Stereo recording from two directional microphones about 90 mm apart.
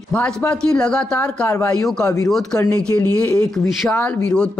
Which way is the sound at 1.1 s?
25° left (ahead or behind).